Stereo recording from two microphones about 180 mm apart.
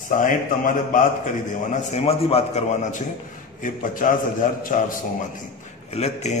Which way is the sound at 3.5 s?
45° left (ahead or behind).